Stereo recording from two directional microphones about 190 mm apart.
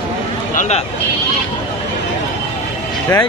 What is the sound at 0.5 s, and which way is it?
Speech, 40° left (ahead or behind).